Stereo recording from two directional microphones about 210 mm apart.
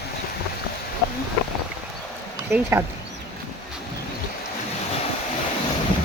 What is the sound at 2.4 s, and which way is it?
Speech, 10° right (ahead or behind).